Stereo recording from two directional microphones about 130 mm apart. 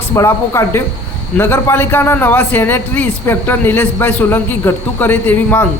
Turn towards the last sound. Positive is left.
turn(degrees=15)  # may be behind; listen again after turning